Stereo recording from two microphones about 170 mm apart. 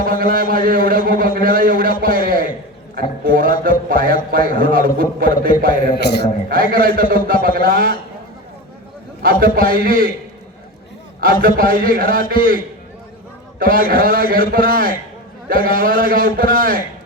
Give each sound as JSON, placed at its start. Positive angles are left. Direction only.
{"t": 0.1, "sound": "a man's voice", "side_deg": -55}
{"t": 6.0, "sound": "a man's voice", "side_deg": 75}
{"t": 6.5, "sound": "a man's voice", "side_deg": -55}
{"t": 9.2, "sound": "a man's voice", "side_deg": -55}
{"t": 11.4, "sound": "a man's voice", "side_deg": -55}
{"t": 13.6, "sound": "a man's voice", "side_deg": -55}